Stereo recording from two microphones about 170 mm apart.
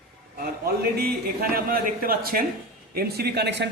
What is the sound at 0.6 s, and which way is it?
A man's voice, 65° right (ahead or behind).